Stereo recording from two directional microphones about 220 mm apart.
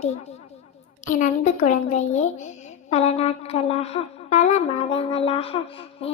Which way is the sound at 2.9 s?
30° left (ahead or behind).